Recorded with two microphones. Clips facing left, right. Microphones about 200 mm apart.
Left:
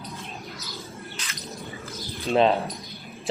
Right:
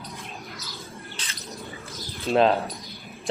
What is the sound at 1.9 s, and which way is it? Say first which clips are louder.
Bird: even; centre (ahead or behind).